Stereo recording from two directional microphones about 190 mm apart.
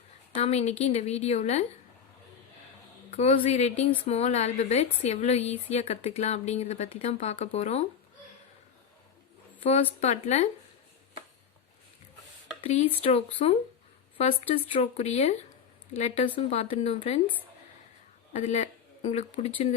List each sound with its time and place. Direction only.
0.3 s a woman's voice: 35° left (ahead or behind)
3.1 s a woman's voice: 35° left (ahead or behind)
10.0 s a woman's voice: 35° left (ahead or behind)
13.0 s a woman's voice: 30° left (ahead or behind)
18.3 s speech: 35° left (ahead or behind)